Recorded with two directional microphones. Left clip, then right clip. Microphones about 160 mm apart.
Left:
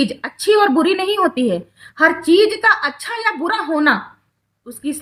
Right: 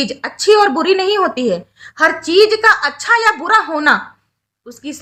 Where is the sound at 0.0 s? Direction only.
20° right (ahead or behind).